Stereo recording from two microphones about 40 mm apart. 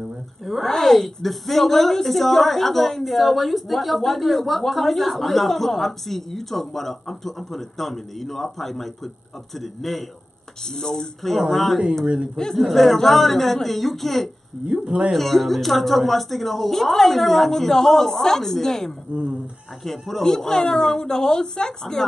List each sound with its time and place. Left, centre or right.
0.7 s a woman's voice: centre
14.7 s speech: right
15.1 s a woman's voice: centre